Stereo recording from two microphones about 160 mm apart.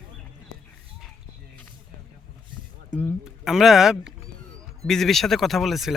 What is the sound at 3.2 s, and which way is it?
Speech, centre (ahead or behind).